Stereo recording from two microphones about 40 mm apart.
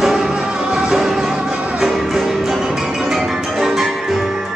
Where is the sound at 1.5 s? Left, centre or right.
Right.